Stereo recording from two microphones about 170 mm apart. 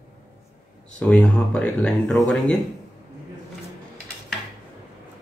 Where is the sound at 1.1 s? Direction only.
5° left (ahead or behind).